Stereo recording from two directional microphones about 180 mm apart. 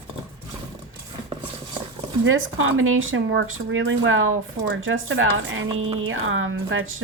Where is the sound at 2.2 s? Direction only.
90° right.